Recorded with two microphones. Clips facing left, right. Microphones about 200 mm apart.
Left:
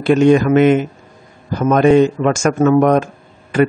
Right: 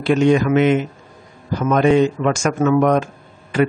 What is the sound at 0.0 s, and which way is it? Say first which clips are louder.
Speech: left 4 dB; 50° left (ahead or behind).